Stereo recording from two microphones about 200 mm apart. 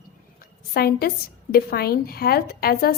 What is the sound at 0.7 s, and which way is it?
A woman's voice, 50° left (ahead or behind).